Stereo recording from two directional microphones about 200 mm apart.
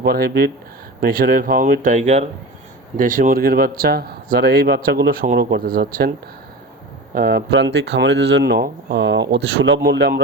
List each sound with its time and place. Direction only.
0.0 s a man's voice: 55° right (ahead or behind)
7.1 s speech: 50° right (ahead or behind)